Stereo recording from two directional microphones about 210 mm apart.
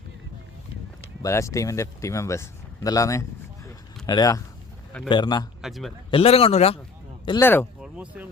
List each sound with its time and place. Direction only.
1.2 s speech: 15° left (ahead or behind)
5.6 s a man's voice: centre (ahead or behind)
6.1 s speech: 30° left (ahead or behind)
7.3 s speech: 10° left (ahead or behind)
7.8 s a sound: 5° right (ahead or behind)